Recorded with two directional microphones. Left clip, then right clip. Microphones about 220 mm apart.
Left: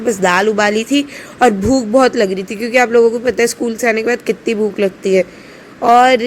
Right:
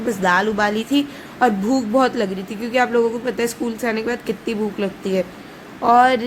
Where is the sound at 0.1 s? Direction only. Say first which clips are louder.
Left 5 dB; 20° left (ahead or behind).